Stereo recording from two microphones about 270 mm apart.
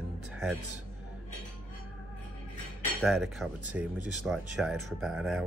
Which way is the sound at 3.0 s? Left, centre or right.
Centre.